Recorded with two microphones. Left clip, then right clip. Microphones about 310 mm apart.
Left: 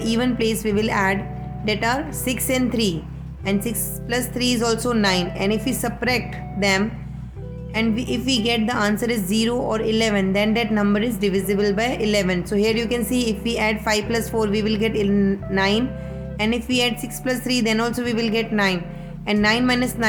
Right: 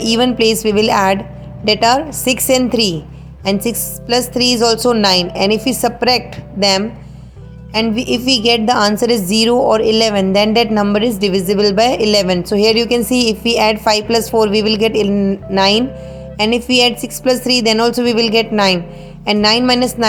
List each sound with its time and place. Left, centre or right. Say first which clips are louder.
0.0 s a woman's voice: right 9 dB; centre